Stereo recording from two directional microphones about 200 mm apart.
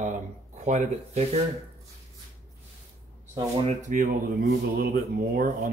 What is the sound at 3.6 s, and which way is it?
Speech, 40° right (ahead or behind).